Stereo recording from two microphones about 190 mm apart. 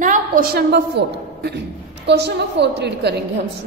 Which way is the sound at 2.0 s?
60° right (ahead or behind).